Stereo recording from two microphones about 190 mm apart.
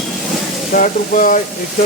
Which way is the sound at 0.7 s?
45° left (ahead or behind).